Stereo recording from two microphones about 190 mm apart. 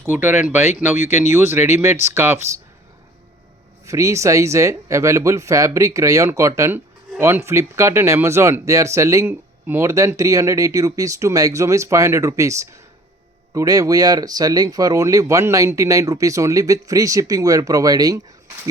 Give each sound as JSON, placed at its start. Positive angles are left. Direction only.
{"t": 0.0, "sound": "speech", "side_deg": -10}
{"t": 3.8, "sound": "speech", "side_deg": -15}